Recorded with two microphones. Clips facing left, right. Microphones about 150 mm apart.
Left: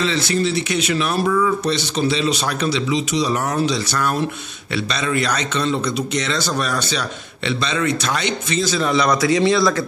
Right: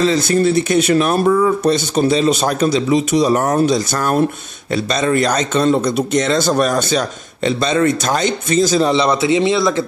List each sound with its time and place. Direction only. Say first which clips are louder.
0.0 s a man's voice: right 6 dB; 45° right (ahead or behind)
8.8 s a man's voice: right 3 dB; 30° right (ahead or behind)